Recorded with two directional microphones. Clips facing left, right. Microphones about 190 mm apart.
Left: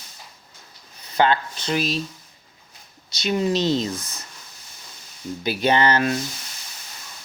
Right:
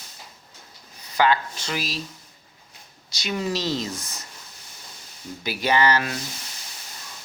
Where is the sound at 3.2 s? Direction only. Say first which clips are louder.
Left 5 dB; 25° left (ahead or behind).